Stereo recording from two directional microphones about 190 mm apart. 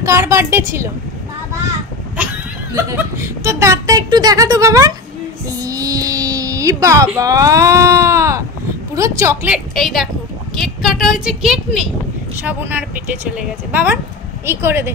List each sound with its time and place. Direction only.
0.0 s speech: 15° right (ahead or behind)
2.7 s speech: 15° right (ahead or behind)
5.5 s a sound: 20° right (ahead or behind)
7.2 s speech: 15° right (ahead or behind)
9.8 s speech: centre (ahead or behind)